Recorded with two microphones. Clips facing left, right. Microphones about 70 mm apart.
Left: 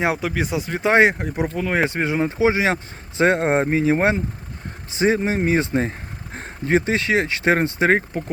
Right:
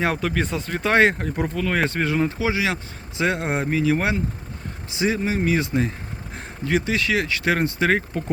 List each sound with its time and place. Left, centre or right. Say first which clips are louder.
0.0 s speech: left 1 dB; centre